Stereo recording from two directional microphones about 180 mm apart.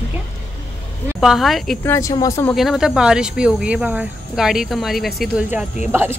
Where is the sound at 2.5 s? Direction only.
Centre (ahead or behind).